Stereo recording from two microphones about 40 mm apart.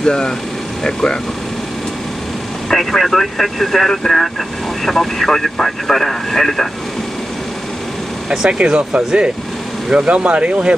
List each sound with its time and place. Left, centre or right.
0.0 s speech: centre
2.7 s speech: centre
8.5 s speech: right